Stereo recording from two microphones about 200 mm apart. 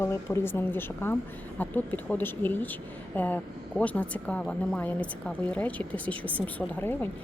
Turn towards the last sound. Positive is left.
turn(degrees=10)  # may be behind; listen again after turning